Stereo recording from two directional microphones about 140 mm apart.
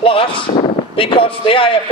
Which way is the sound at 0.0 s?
40° left (ahead or behind).